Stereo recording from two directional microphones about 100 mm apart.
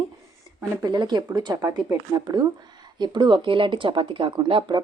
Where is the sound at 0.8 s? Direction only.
45° right (ahead or behind).